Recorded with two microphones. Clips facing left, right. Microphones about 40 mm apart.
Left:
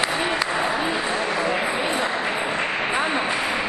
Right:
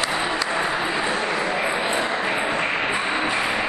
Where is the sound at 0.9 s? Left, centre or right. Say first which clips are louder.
Right 1 dB; centre.